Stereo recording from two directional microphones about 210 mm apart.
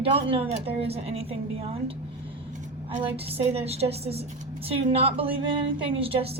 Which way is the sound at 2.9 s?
30° right (ahead or behind).